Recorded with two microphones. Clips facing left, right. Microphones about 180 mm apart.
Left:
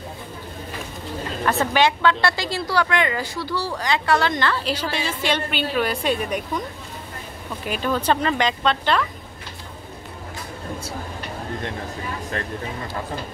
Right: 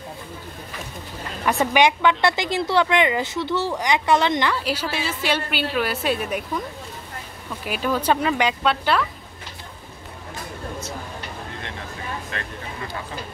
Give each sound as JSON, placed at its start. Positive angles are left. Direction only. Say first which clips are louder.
{"t": 1.6, "sound": "a woman's voice", "louder": "right 2 dB", "side_deg": -15}
{"t": 7.6, "sound": "a woman's voice", "louder": "even", "side_deg": -5}